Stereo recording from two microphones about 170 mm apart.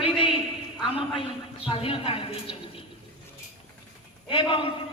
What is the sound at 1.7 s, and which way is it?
Speech, 30° left (ahead or behind).